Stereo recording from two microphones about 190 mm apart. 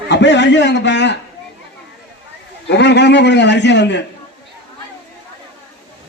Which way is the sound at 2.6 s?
65° left (ahead or behind).